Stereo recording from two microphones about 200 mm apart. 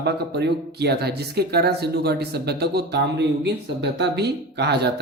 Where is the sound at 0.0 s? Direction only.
55° right (ahead or behind).